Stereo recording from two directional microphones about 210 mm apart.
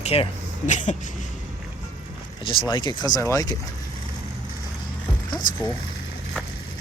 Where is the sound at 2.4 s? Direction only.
25° left (ahead or behind).